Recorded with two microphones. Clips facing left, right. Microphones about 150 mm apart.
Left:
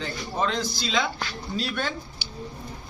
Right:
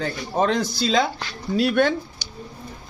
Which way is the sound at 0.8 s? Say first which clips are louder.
Right 7 dB; 40° right (ahead or behind).